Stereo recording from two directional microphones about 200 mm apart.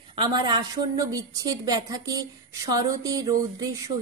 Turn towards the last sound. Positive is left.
turn(degrees=-20)  # may be behind; listen again after turning